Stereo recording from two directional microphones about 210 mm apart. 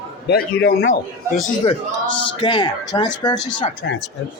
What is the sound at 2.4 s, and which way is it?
Speech, 20° left (ahead or behind).